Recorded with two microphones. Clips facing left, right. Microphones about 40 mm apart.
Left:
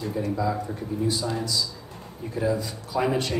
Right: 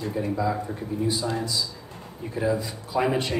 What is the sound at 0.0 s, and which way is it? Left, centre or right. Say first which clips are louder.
A man's voice: even; centre.